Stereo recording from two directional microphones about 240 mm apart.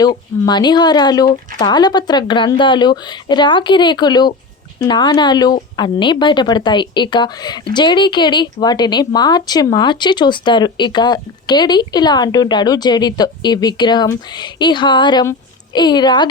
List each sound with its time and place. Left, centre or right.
0.0 s speech: centre